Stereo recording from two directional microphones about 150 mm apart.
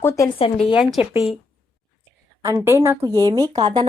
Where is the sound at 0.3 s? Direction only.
40° left (ahead or behind).